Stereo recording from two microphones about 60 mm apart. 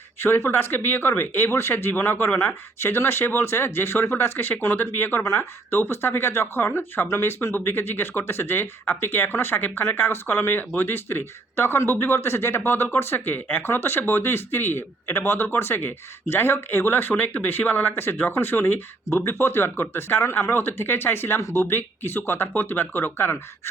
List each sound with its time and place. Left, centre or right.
0.2 s speech: left
5.2 s speech: left